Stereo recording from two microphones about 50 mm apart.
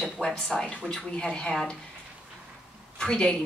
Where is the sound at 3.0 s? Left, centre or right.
Centre.